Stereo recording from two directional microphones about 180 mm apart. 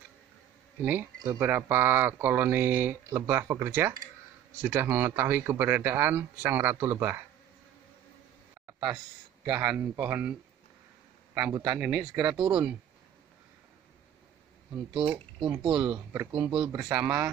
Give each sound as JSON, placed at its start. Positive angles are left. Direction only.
{"t": 1.4, "sound": "speech", "side_deg": -10}
{"t": 9.4, "sound": "speech", "side_deg": -10}
{"t": 11.3, "sound": "speech", "side_deg": -15}
{"t": 15.0, "sound": "speech", "side_deg": -30}
{"t": 16.8, "sound": "speech", "side_deg": -10}